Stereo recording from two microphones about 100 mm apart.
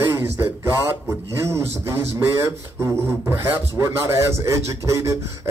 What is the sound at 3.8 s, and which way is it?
Speech, 30° right (ahead or behind).